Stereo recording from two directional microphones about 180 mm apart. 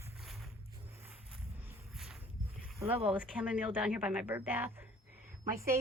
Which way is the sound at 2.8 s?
30° right (ahead or behind).